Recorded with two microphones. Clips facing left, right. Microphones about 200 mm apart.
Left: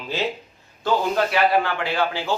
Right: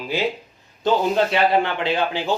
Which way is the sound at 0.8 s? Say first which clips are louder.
Right 3 dB; 25° right (ahead or behind).